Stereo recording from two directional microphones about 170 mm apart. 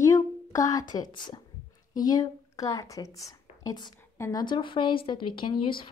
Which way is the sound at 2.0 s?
20° left (ahead or behind).